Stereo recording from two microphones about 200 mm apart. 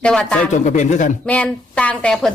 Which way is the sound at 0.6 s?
35° left (ahead or behind).